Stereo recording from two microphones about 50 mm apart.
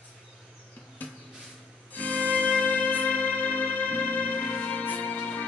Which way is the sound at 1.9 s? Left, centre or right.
Left.